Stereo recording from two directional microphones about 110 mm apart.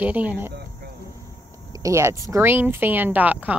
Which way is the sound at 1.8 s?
25° right (ahead or behind).